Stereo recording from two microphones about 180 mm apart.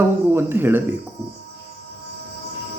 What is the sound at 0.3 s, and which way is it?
Speech, 10° right (ahead or behind).